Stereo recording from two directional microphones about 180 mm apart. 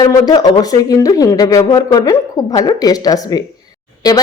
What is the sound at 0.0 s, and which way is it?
A woman's voice, 20° left (ahead or behind).